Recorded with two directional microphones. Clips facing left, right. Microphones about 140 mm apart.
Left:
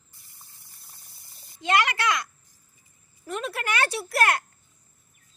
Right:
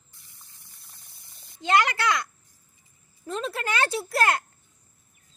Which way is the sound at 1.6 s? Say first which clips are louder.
Right 1 dB; 30° right (ahead or behind).